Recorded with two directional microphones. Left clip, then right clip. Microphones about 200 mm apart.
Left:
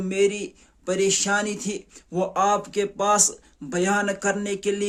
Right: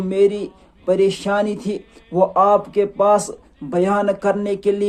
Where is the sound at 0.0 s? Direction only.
20° left (ahead or behind).